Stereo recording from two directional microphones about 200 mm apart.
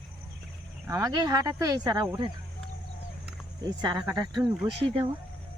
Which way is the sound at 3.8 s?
20° right (ahead or behind).